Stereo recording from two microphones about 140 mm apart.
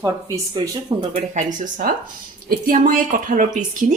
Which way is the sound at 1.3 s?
70° right (ahead or behind).